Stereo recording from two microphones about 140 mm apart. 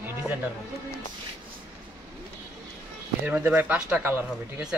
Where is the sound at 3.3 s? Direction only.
10° right (ahead or behind).